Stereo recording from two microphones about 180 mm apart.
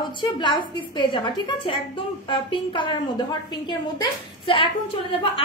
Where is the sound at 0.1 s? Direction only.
25° left (ahead or behind).